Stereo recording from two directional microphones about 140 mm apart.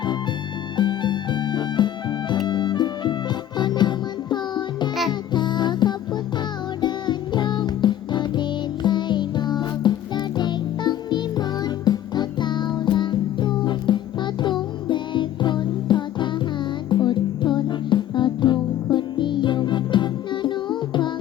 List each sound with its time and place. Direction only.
0.8 s music: 35° left (ahead or behind)